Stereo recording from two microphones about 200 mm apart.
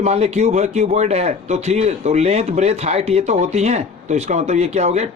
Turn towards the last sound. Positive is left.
turn(degrees=-35)  # may be behind; listen again after turning